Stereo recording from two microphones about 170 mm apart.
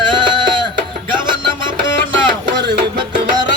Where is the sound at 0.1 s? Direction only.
30° right (ahead or behind).